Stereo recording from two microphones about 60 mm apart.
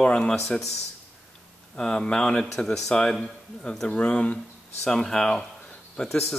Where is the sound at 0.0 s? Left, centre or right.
Centre.